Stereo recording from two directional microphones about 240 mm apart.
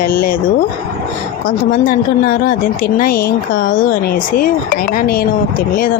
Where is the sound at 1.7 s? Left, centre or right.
Left.